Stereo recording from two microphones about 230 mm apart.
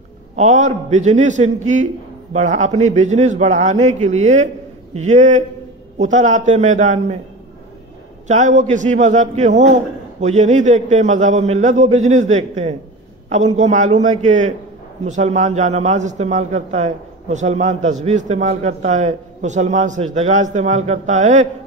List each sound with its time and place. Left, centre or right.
0.4 s a man's voice: right
8.3 s a man's voice: right